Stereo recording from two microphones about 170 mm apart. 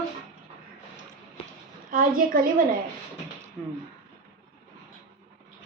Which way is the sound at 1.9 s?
55° right (ahead or behind).